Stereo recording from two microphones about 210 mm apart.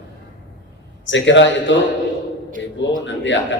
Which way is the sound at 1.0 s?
60° left (ahead or behind).